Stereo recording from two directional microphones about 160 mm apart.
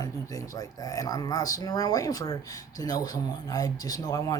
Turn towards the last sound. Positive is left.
turn(degrees=20)  # may be behind; listen again after turning